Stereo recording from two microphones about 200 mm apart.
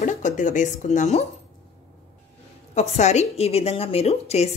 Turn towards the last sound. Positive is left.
turn(degrees=30)  # may be behind; listen again after turning